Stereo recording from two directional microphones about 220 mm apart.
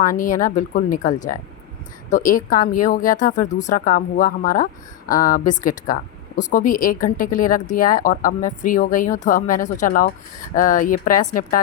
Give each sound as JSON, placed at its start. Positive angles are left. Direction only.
{"t": 0.0, "sound": "speech", "side_deg": 40}